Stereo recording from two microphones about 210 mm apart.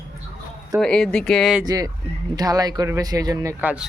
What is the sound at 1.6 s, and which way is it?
Speech, 15° right (ahead or behind).